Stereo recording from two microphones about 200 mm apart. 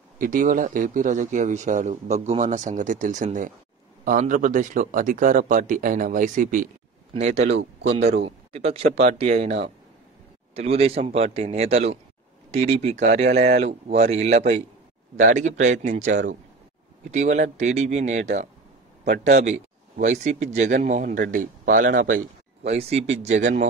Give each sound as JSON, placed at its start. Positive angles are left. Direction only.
{"t": 0.2, "sound": "speech", "side_deg": -40}
{"t": 12.4, "sound": "a sound", "side_deg": -35}
{"t": 13.0, "sound": "speech", "side_deg": -35}
{"t": 22.6, "sound": "speech", "side_deg": -30}